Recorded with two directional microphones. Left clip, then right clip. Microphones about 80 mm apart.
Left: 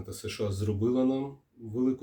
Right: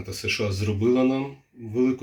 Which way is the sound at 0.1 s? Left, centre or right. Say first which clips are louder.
Right 8 dB; left.